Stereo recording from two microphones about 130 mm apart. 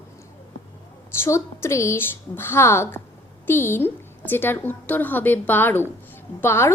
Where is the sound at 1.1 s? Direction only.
20° left (ahead or behind).